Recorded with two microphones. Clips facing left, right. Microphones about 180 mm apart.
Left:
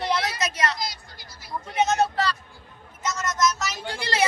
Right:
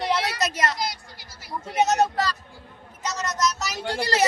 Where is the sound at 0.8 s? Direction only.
70° right (ahead or behind).